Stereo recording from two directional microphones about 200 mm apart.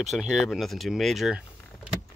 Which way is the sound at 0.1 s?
Centre (ahead or behind).